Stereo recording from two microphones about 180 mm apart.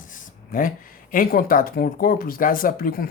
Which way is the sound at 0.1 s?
50° left (ahead or behind).